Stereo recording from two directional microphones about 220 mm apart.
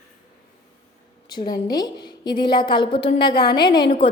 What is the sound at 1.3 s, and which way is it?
A woman's voice, 20° left (ahead or behind).